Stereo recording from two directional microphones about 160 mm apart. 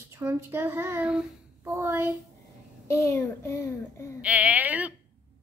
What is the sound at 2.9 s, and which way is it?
A child's voice, 15° left (ahead or behind).